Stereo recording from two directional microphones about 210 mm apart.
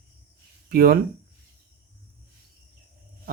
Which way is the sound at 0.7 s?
45° right (ahead or behind).